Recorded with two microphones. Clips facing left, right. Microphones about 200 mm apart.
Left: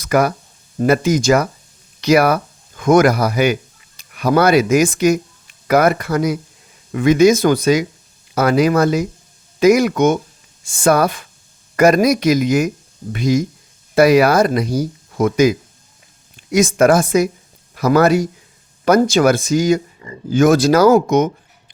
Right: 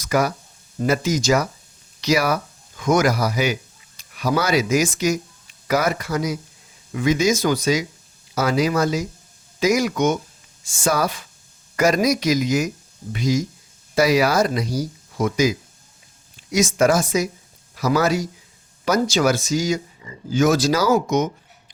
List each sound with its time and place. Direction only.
0.0 s speech: 55° left (ahead or behind)